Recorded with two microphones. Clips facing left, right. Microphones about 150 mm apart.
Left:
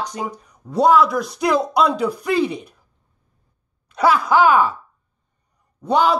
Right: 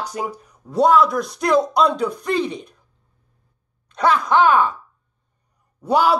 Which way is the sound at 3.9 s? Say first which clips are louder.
Left 1 dB; 5° left (ahead or behind).